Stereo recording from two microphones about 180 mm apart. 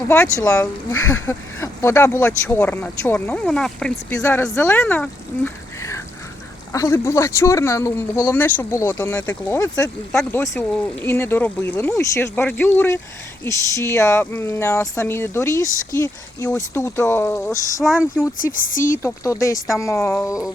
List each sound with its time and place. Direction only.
0.1 s speech: 15° left (ahead or behind)
10.1 s speech: 5° left (ahead or behind)
18.3 s speech: 50° left (ahead or behind)
19.0 s speech: 15° left (ahead or behind)